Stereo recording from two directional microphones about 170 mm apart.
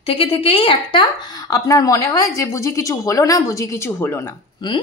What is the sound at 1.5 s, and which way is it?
A woman's voice, 20° left (ahead or behind).